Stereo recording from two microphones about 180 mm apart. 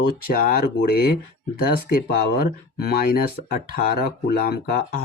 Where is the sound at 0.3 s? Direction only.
55° left (ahead or behind).